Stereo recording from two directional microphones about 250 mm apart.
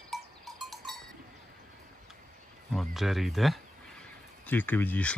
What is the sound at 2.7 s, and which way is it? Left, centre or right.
Speech, centre.